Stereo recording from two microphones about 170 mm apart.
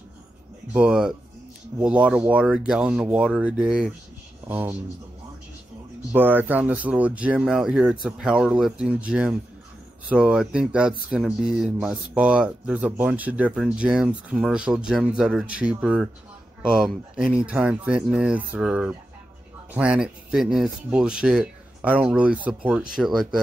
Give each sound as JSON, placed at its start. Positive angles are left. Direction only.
{"t": 0.7, "sound": "speech", "side_deg": -5}
{"t": 6.1, "sound": "speech", "side_deg": -10}